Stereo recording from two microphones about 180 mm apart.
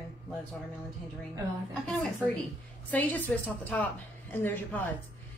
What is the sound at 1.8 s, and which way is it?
A woman's voice, 5° left (ahead or behind).